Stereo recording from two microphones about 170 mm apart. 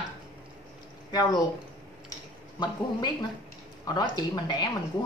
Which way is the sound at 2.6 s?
25° left (ahead or behind).